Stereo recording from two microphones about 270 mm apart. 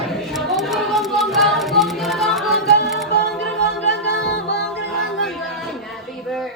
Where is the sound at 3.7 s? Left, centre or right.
Left.